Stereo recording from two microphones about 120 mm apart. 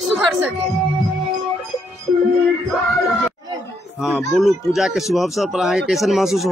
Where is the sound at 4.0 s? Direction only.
Centre (ahead or behind).